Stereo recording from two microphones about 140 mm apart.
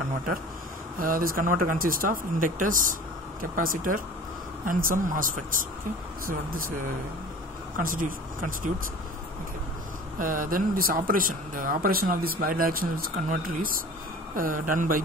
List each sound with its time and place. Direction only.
0.9 s speech: 90° right; by 5.6 s 75° right (ahead or behind)
7.8 s speech: 75° right (ahead or behind)
10.1 s speech: 80° right
14.3 s speech: 80° right